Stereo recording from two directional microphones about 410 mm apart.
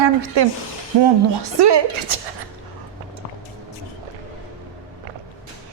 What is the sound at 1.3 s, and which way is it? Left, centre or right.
Speech, right.